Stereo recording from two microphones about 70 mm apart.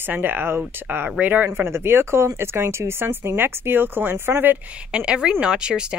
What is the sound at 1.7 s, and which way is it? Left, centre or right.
Speech, right.